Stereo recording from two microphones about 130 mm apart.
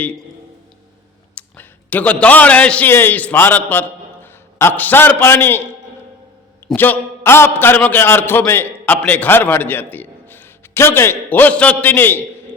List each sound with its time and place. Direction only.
1.4 s a man's voice: 10° left (ahead or behind)
6.7 s a man's voice: 15° left (ahead or behind)